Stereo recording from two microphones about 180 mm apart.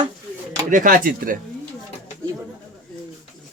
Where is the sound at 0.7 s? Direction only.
50° right (ahead or behind).